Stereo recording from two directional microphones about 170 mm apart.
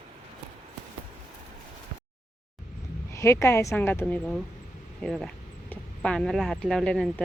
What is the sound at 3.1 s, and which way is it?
A woman's voice, 15° left (ahead or behind).